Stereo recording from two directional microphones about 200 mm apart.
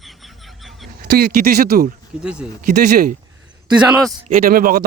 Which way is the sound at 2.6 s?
45° right (ahead or behind).